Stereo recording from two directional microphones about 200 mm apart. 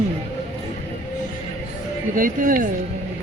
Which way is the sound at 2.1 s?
45° right (ahead or behind).